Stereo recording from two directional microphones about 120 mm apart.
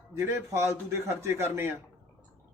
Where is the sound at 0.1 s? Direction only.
20° right (ahead or behind).